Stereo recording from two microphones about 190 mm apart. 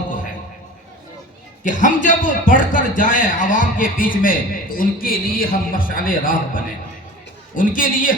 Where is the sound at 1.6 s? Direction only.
45° left (ahead or behind).